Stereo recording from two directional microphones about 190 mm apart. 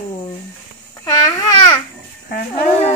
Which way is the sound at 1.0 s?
20° left (ahead or behind).